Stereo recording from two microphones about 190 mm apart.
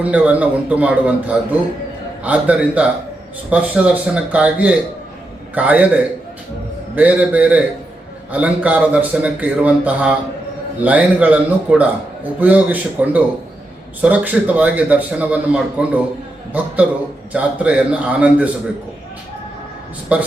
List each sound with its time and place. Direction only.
0.0 s a man's voice: 10° right (ahead or behind)
6.9 s a man's voice: 5° right (ahead or behind)
20.1 s a man's voice: 5° right (ahead or behind)